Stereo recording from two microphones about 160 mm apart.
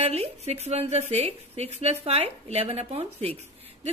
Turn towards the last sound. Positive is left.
turn(degrees=-40)  # may be behind; listen again after turning